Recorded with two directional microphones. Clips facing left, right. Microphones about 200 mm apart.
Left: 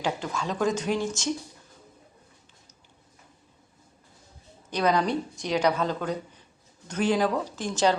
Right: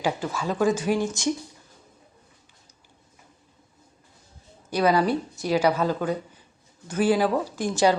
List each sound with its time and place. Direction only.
0.0 s a woman's voice: 5° right (ahead or behind)
4.7 s a woman's voice: 5° right (ahead or behind)